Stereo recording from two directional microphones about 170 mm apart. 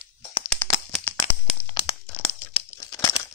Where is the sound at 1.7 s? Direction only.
25° left (ahead or behind).